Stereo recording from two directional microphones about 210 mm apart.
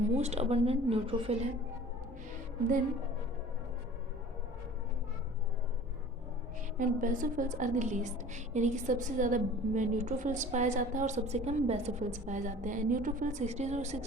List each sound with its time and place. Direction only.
0.0 s a woman's voice: 30° right (ahead or behind)
6.7 s a woman's voice: 40° right (ahead or behind)